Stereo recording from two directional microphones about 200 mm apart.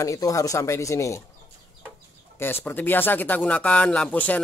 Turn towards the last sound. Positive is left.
turn(degrees=5)  # may be behind; listen again after turning